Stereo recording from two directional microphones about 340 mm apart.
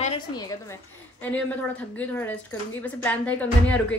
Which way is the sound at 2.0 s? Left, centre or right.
Centre.